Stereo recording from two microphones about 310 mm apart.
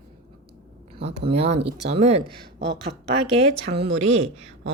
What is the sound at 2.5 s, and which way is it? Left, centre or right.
Speech, right.